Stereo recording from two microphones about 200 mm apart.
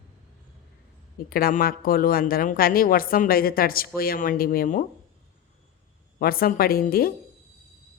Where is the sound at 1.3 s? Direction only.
45° left (ahead or behind).